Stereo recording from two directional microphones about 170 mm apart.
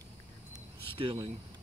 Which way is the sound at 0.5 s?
30° right (ahead or behind).